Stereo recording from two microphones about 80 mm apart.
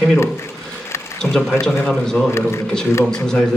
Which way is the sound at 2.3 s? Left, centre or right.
Left.